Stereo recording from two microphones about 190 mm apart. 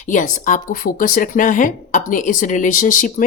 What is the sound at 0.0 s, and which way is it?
A woman's voice, 45° left (ahead or behind).